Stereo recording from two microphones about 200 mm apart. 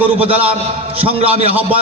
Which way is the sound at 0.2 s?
30° right (ahead or behind).